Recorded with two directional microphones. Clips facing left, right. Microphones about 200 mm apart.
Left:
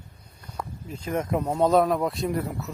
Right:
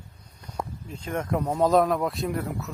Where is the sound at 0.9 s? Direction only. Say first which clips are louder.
Left 2 dB; 5° left (ahead or behind).